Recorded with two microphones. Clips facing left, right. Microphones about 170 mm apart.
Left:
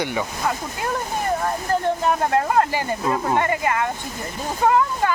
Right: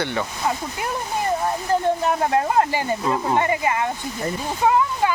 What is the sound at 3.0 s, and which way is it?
Speech, 5° left (ahead or behind).